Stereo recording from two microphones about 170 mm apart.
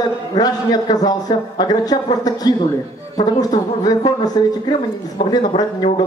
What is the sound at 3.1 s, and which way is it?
A man's voice, 20° left (ahead or behind).